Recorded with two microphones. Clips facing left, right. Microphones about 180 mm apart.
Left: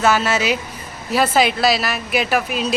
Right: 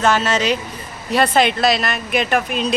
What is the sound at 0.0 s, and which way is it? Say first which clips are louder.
A woman's voice: even; 10° left (ahead or behind).